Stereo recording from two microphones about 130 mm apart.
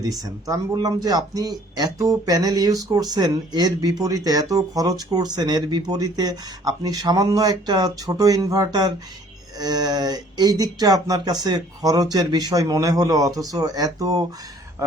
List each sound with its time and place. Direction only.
0.2 s speech: 25° right (ahead or behind)